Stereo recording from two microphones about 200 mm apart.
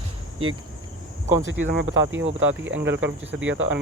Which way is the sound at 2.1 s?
70° right (ahead or behind).